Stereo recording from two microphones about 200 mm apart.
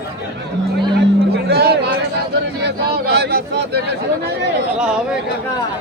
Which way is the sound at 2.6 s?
55° right (ahead or behind).